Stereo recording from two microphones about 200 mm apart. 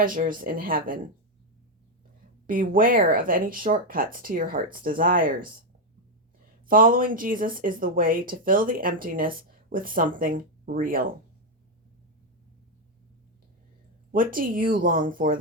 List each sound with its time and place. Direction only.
0.0 s speech: 45° right (ahead or behind)
2.5 s speech: 45° right (ahead or behind)
6.7 s speech: 45° right (ahead or behind)
14.1 s speech: 45° right (ahead or behind)